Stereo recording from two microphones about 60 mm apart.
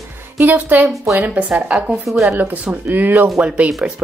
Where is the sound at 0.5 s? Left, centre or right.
Right.